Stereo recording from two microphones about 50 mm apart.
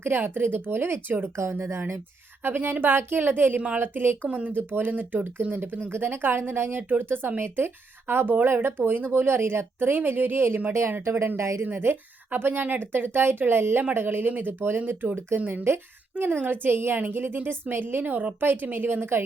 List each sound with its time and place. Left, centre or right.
0.0 s a woman's voice: right
1.4 s speech: right
2.4 s a woman's voice: right
4.2 s a woman's voice: right
10.7 s a woman's voice: right
11.3 s speech: right
11.6 s a woman's voice: right
15.6 s a woman's voice: right